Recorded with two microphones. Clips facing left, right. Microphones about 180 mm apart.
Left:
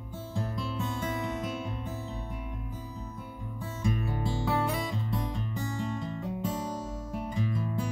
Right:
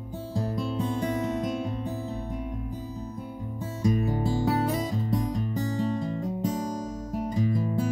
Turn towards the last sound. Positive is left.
turn(degrees=-35)  # may be behind; listen again after turning